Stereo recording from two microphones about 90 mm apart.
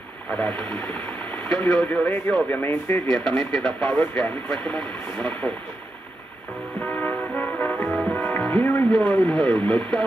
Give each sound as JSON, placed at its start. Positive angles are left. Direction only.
{"t": 0.3, "sound": "speech", "side_deg": 10}
{"t": 3.1, "sound": "speech", "side_deg": 10}
{"t": 6.8, "sound": "music", "side_deg": 15}
{"t": 8.1, "sound": "speech", "side_deg": 10}